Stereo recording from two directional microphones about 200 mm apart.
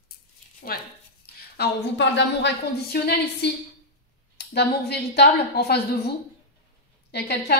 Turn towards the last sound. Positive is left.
turn(degrees=55)  # may be behind; listen again after turning